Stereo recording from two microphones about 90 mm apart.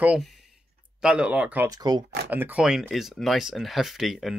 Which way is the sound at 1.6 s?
50° right (ahead or behind).